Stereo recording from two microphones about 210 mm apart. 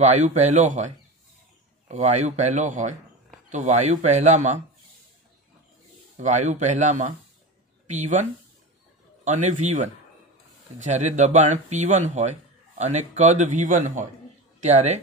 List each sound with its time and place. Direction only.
0.0 s speech: 35° right (ahead or behind)
6.1 s speech: 35° right (ahead or behind)